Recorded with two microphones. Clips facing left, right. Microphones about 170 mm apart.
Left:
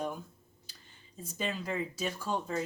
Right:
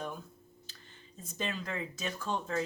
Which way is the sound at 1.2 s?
10° left (ahead or behind).